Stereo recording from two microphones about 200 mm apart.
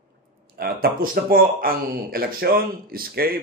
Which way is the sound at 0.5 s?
50° right (ahead or behind).